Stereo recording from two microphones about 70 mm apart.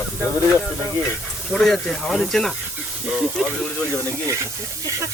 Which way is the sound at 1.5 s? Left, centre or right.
Centre.